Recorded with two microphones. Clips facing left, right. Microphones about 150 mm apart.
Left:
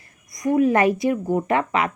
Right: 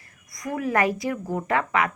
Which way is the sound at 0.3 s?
20° left (ahead or behind).